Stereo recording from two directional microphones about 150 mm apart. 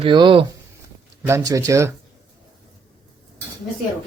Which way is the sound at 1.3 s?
20° right (ahead or behind).